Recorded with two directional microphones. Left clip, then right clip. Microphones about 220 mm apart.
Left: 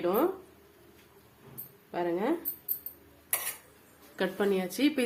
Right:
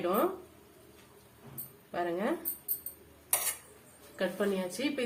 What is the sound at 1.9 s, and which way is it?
Speech, 35° left (ahead or behind).